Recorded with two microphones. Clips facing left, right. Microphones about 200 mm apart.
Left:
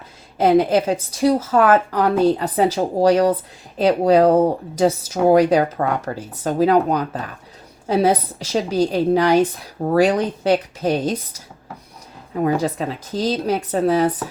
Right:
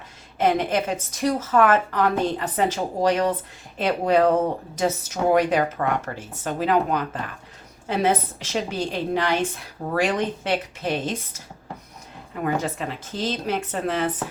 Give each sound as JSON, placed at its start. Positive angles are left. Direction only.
{"t": 0.3, "sound": "speech", "side_deg": 35}
{"t": 12.4, "sound": "speech", "side_deg": 35}